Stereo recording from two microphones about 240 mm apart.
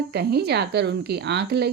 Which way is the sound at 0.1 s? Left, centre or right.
Right.